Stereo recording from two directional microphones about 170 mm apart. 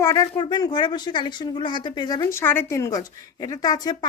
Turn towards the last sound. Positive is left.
turn(degrees=25)  # may be behind; listen again after turning